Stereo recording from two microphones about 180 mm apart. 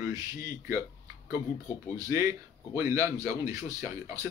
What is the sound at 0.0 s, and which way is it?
Speech, 20° right (ahead or behind).